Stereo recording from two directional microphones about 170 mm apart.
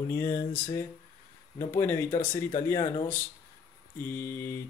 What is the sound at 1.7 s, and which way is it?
Mantra, 15° left (ahead or behind).